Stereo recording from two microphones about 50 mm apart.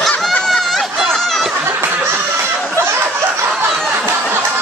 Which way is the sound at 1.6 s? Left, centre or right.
Right.